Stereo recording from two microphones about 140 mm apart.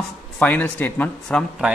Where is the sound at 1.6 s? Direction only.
5° right (ahead or behind).